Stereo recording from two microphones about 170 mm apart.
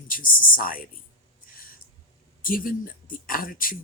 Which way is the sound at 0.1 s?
55° left (ahead or behind).